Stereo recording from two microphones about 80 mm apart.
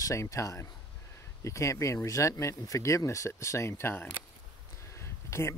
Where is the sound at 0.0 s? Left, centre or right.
Left.